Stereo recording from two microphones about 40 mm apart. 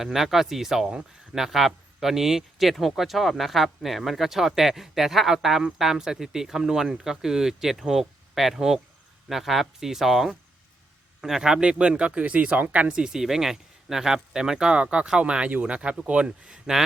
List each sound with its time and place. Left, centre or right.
0.0 s speech: centre; by 13.0 s right
13.2 s speech: centre
14.8 s speech: right